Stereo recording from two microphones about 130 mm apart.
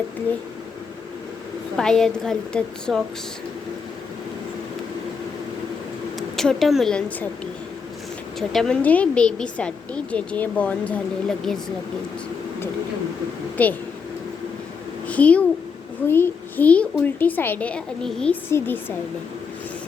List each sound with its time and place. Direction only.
1.7 s a woman's voice: 5° left (ahead or behind)
6.1 s a woman's voice: 5° left (ahead or behind)
8.4 s a woman's voice: 5° left (ahead or behind)
13.6 s a woman's voice: 10° left (ahead or behind)
15.0 s a child's voice: 10° left (ahead or behind)
18.4 s a woman's voice: 15° left (ahead or behind)